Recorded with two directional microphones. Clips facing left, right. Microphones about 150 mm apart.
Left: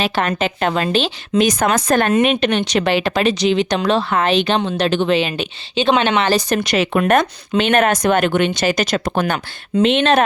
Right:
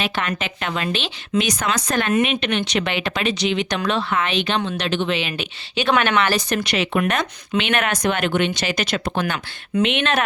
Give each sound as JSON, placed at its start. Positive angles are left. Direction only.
{"t": 0.0, "sound": "speech", "side_deg": 35}
{"t": 5.7, "sound": "speech", "side_deg": 25}